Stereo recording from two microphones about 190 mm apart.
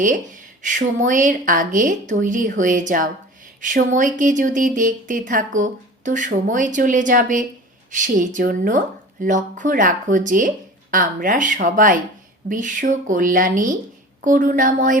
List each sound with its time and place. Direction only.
0.0 s speech: 40° right (ahead or behind)